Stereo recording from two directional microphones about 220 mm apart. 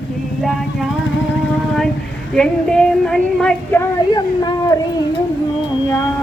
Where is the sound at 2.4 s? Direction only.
5° left (ahead or behind).